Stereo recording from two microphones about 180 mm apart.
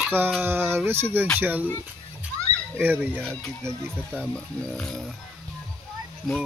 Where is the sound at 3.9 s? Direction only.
5° left (ahead or behind).